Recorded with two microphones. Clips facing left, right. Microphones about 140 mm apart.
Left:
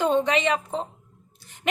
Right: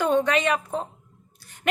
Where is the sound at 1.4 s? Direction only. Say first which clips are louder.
Even; 20° left (ahead or behind).